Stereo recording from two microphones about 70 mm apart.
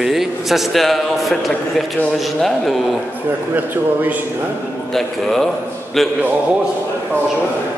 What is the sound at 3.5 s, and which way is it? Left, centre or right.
Speech, right.